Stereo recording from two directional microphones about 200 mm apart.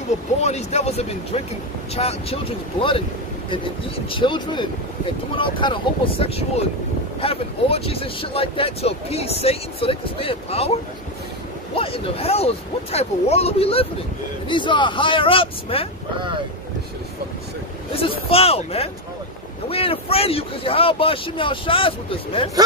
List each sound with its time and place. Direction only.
0.4 s speech: 35° left (ahead or behind)
4.1 s speech: 25° left (ahead or behind)
17.9 s speech: 30° left (ahead or behind)